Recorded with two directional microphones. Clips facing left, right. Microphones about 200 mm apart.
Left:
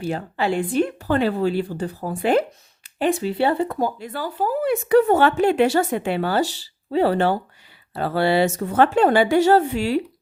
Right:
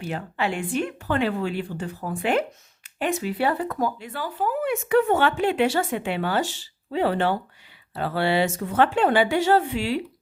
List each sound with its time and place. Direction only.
0.0 s speech: 35° left (ahead or behind)